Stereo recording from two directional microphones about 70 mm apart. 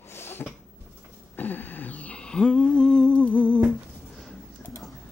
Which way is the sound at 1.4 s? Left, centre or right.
Left.